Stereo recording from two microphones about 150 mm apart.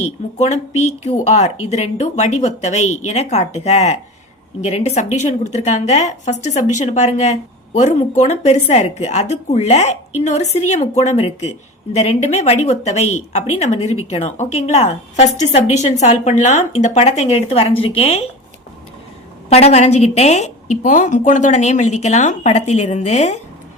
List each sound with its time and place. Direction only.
0.3 s a woman's voice: 50° left (ahead or behind)
19.5 s a woman's voice: 45° left (ahead or behind)